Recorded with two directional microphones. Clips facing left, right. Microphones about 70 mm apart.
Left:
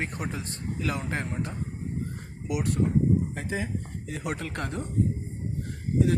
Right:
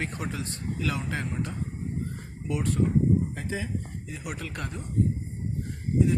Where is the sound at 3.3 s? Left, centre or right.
Left.